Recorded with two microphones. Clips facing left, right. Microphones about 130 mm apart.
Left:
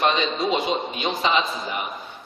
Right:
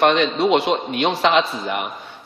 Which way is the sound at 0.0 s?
70° right (ahead or behind).